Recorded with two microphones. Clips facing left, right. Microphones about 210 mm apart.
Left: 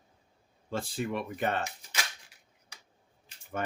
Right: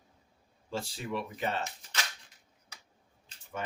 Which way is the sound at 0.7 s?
55° left (ahead or behind).